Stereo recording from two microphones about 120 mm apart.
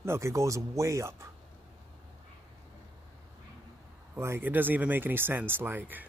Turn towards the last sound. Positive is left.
turn(degrees=-15)  # may be behind; listen again after turning